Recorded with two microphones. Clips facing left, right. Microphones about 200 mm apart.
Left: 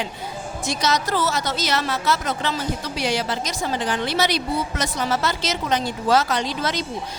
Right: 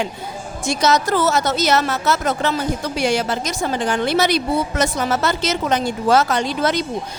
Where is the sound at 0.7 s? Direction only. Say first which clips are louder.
Right 6 dB; 50° right (ahead or behind).